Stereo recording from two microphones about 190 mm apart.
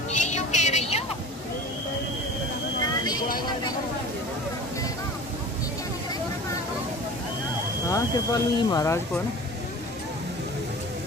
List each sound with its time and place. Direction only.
0.1 s vehicle: 40° left (ahead or behind)
2.8 s vehicle: 20° left (ahead or behind)
7.9 s speech: 20° left (ahead or behind)